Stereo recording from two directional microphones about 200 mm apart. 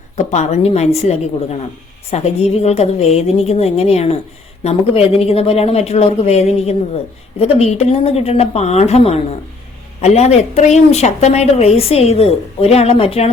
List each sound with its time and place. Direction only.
0.3 s a woman's voice: 35° left (ahead or behind)